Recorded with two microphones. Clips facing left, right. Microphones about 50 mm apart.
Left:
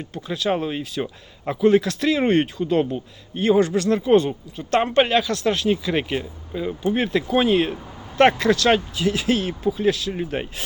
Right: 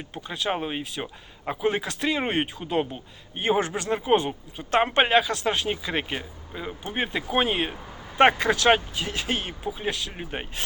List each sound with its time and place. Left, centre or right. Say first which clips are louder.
0.0 s speech: left 5 dB; centre
2.9 s speech: left 8 dB; right
9.0 s speech: left 7 dB; centre